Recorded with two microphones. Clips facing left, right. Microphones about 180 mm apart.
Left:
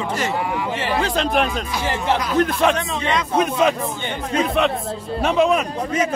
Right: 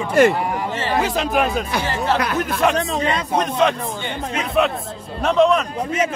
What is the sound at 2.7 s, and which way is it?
Speech, 35° right (ahead or behind).